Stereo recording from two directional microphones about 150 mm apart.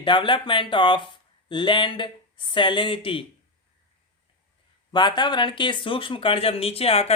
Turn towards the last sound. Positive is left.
turn(degrees=40)  # may be behind; listen again after turning